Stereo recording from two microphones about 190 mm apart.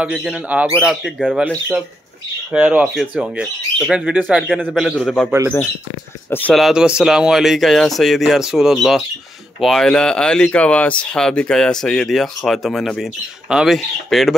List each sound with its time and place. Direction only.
0.0 s speech: 5° right (ahead or behind)
6.3 s speech: 5° left (ahead or behind)